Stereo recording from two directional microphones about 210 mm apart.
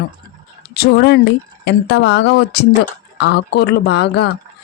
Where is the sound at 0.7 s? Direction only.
50° left (ahead or behind).